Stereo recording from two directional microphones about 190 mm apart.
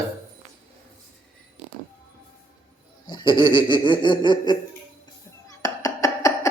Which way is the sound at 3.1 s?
25° left (ahead or behind).